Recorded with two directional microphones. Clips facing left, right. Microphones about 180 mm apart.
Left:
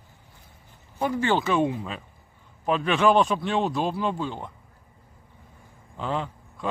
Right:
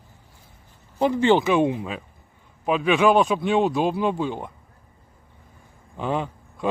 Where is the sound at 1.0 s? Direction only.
20° right (ahead or behind).